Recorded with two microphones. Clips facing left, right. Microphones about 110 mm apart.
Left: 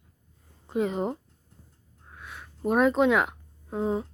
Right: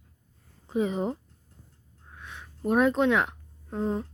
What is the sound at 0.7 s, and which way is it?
Speech, centre (ahead or behind).